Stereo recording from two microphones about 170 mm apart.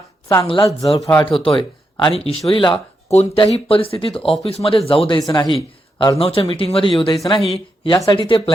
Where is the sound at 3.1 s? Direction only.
40° left (ahead or behind).